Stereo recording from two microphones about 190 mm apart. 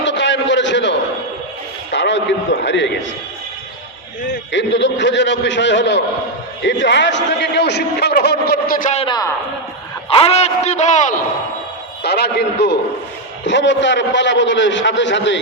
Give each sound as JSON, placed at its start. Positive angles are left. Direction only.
{"t": 0.0, "sound": "a sound", "side_deg": 70}
{"t": 2.6, "sound": "a man's voice", "side_deg": 70}
{"t": 4.3, "sound": "a man's voice", "side_deg": 70}
{"t": 10.1, "sound": "a man's voice", "side_deg": 30}
{"t": 12.0, "sound": "a man's voice", "side_deg": 60}